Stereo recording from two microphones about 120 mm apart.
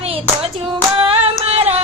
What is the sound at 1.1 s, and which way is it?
Female singing, 55° right (ahead or behind).